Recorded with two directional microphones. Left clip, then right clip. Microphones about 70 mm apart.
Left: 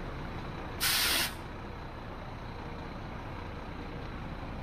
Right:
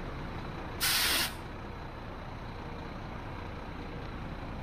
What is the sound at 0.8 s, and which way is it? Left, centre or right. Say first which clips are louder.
Spray: even; right.